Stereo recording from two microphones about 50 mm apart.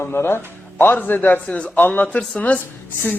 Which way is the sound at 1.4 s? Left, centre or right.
Left.